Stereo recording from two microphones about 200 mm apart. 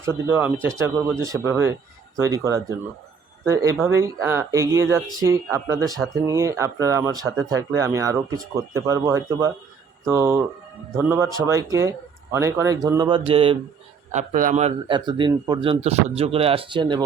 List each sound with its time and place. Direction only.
0.0 s speech: 10° right (ahead or behind); by 13.6 s 25° right (ahead or behind)
14.1 s a man's voice: 40° right (ahead or behind); by 17.0 s 25° right (ahead or behind)